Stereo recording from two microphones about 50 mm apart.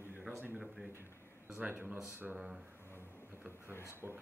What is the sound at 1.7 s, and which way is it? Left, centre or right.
Speech, right.